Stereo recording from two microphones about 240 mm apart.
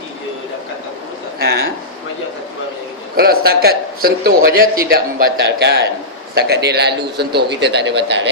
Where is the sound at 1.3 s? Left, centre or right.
Right.